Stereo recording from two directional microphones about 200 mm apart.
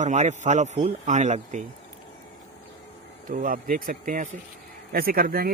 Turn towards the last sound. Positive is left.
turn(degrees=-50)  # may be behind; listen again after turning